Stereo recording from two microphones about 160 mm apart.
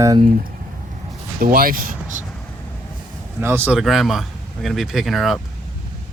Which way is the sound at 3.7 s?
Centre (ahead or behind).